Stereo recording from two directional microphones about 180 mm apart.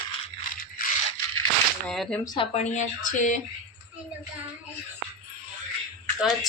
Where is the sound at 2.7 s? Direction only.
45° left (ahead or behind).